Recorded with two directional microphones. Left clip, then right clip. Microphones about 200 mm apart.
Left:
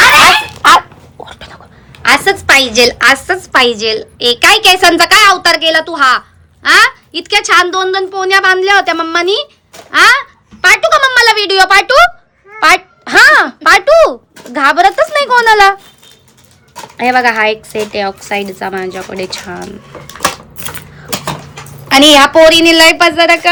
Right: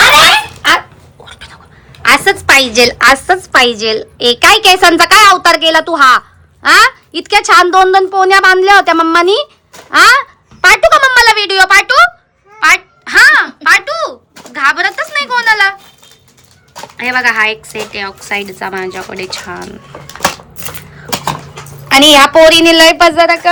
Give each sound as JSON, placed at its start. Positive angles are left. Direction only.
{"t": 1.2, "sound": "whispering", "side_deg": 30}
{"t": 2.0, "sound": "a sound", "side_deg": 10}
{"t": 2.5, "sound": "a woman's voice", "side_deg": 10}
{"t": 17.0, "sound": "a woman's voice", "side_deg": 20}
{"t": 21.8, "sound": "a woman's voice", "side_deg": 15}